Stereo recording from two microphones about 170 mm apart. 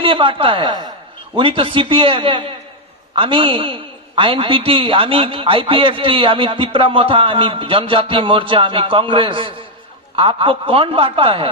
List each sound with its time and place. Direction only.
0.0 s a woman's voice: 30° right (ahead or behind)